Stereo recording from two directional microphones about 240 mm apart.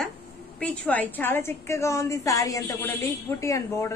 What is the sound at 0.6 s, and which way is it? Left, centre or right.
A woman's voice, centre.